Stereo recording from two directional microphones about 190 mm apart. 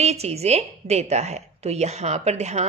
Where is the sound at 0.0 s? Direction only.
35° right (ahead or behind).